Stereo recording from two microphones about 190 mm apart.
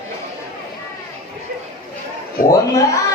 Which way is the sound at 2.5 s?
15° left (ahead or behind).